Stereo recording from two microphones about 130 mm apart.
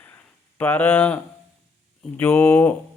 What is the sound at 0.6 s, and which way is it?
Speech, 15° left (ahead or behind).